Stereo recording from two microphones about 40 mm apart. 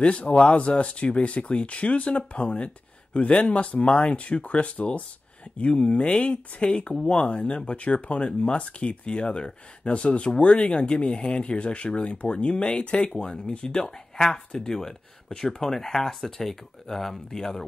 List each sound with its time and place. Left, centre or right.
0.4 s speech: left; by 17.6 s centre